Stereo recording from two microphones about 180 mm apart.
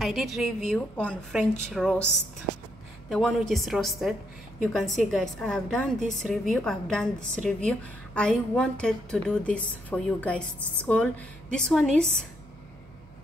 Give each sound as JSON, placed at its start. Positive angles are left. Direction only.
{"t": 0.0, "sound": "a woman's voice", "side_deg": 0}
{"t": 3.1, "sound": "a woman's voice", "side_deg": 0}